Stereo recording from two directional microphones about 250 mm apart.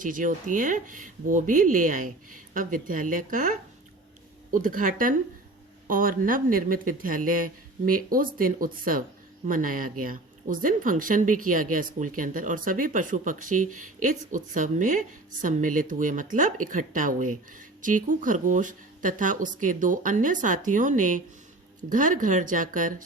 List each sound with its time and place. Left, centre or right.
0.0 s speech: right